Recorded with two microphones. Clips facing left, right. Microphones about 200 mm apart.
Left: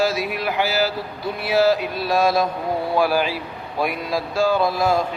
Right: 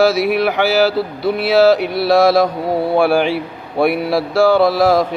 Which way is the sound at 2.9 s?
60° right (ahead or behind).